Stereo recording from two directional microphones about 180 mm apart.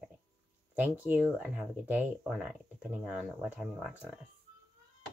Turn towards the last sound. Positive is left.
turn(degrees=0)  # may be behind; listen again after turning